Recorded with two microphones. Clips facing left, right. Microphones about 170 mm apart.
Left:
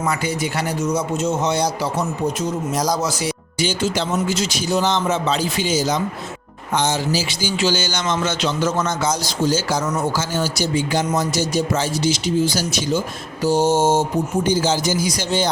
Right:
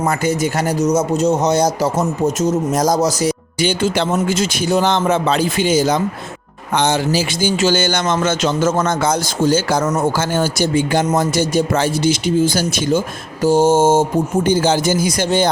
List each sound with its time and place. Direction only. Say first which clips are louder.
0.0 s speech: right 5 dB; 45° right (ahead or behind)
3.6 s a man's voice: right 4 dB; 55° right (ahead or behind)